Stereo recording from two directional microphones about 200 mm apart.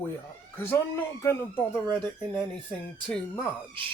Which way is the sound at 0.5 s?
10° left (ahead or behind).